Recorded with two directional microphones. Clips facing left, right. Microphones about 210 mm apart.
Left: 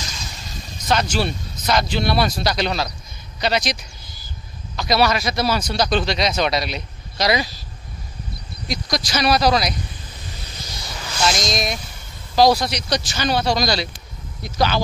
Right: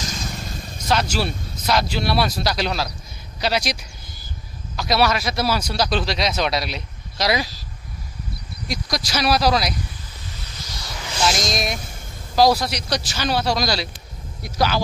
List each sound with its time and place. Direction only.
0.1 s a sound: 55° right (ahead or behind)
0.8 s speech: 5° right (ahead or behind)
4.7 s speech: 5° right (ahead or behind)
8.6 s speech: 5° right (ahead or behind)
11.2 s speech: 10° right (ahead or behind)